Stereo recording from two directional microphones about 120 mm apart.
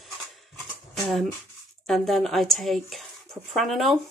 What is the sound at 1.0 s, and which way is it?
A woman's voice, centre (ahead or behind).